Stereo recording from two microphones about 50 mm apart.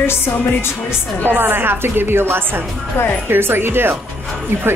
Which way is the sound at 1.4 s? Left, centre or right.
Right.